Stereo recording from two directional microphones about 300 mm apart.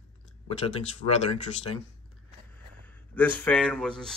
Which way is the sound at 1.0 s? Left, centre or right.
Left.